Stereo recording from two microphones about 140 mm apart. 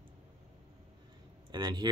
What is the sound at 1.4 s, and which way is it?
Speech, 30° right (ahead or behind).